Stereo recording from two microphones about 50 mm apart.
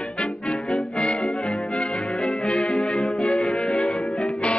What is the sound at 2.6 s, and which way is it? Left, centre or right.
Music, left.